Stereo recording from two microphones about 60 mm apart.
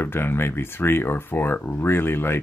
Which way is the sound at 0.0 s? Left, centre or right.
Left.